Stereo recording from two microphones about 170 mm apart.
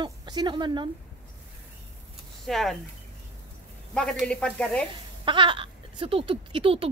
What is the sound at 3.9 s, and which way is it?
Speech, 5° left (ahead or behind).